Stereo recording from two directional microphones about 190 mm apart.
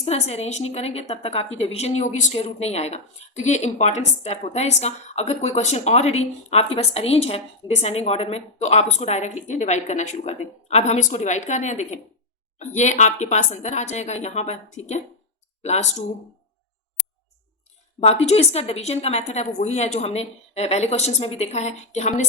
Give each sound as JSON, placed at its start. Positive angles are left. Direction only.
{"t": 0.0, "sound": "a woman's voice", "side_deg": 35}
{"t": 18.0, "sound": "a woman's voice", "side_deg": 35}